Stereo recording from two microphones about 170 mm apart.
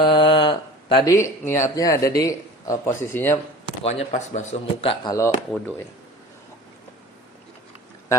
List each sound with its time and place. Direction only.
0.0 s a sound: 30° left (ahead or behind)
1.1 s speech: 15° left (ahead or behind)
3.8 s a man's voice: 40° left (ahead or behind)